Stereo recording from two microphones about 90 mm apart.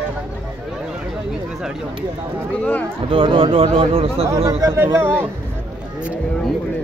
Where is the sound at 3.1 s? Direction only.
85° right.